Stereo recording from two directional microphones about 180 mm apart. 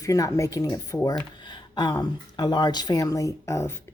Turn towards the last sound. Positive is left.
turn(degrees=15)  # may be behind; listen again after turning